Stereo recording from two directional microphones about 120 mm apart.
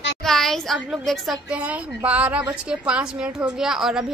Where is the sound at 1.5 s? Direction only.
10° right (ahead or behind).